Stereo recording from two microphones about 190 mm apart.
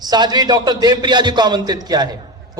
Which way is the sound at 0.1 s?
20° right (ahead or behind).